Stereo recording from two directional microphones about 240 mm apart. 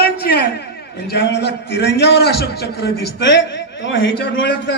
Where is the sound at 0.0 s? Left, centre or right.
Left.